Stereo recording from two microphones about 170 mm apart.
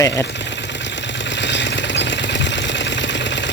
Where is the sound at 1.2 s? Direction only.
90° left.